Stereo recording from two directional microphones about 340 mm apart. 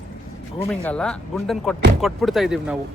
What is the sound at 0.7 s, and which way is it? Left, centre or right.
Speech, centre.